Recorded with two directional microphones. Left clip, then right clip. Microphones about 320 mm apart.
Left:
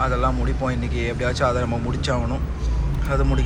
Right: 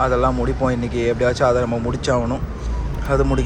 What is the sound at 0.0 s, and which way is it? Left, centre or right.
Speech, centre.